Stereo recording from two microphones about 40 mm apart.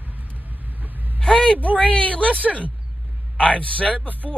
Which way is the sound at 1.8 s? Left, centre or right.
Left.